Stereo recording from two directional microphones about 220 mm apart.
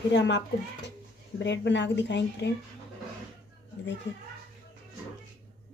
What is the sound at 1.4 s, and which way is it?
Speech, 50° left (ahead or behind).